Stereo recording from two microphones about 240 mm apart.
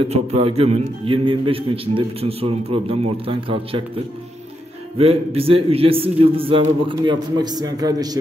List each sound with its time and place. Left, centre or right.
0.0 s a man's voice: right